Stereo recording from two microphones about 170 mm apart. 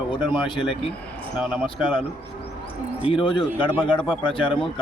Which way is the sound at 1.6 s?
30° left (ahead or behind).